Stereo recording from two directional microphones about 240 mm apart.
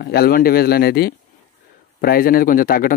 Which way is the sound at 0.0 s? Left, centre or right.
Left.